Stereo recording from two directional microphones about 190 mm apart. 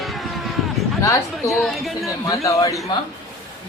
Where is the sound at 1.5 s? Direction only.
Centre (ahead or behind).